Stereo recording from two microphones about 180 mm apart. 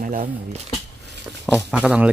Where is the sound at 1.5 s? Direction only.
5° right (ahead or behind).